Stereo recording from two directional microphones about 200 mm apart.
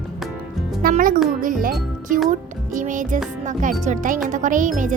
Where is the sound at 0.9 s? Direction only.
45° right (ahead or behind).